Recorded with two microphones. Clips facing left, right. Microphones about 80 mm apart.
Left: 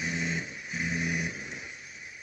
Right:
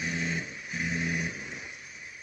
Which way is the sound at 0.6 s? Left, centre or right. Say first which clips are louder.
Even; left.